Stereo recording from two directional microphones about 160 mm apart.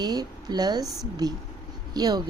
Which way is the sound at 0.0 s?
25° right (ahead or behind).